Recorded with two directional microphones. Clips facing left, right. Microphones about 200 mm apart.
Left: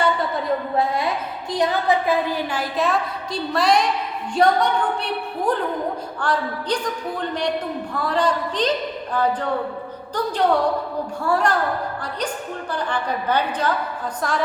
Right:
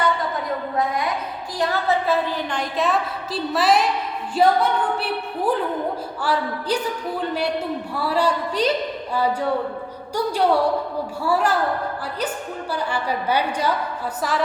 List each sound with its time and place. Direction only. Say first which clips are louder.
1.5 s a woman's voice: left 2 dB; 15° left (ahead or behind); by 11.5 s 5° right (ahead or behind)
12.7 s a woman's voice: even; 10° right (ahead or behind)